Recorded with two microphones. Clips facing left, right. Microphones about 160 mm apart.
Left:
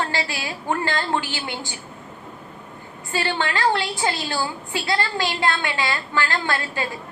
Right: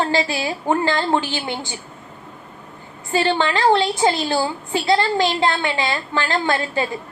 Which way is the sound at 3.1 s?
20° right (ahead or behind).